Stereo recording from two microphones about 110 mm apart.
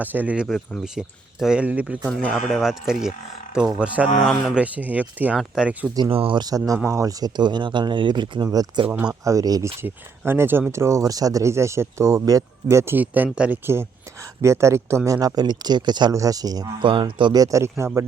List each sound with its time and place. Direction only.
0.0 s speech: 15° right (ahead or behind)
0.4 s speech: centre (ahead or behind)
6.1 s speech: 55° right (ahead or behind)
6.4 s speech: 35° right (ahead or behind)
8.9 s speech: 15° right (ahead or behind)
9.2 s speech: 30° right (ahead or behind)
9.8 s speech: 20° right (ahead or behind)
13.7 s speech: 25° right (ahead or behind)
16.8 s speech: 50° right (ahead or behind); by 18.0 s 25° right (ahead or behind)